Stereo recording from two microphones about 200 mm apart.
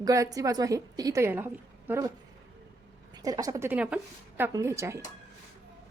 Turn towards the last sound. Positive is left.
turn(degrees=-15)  # may be behind; listen again after turning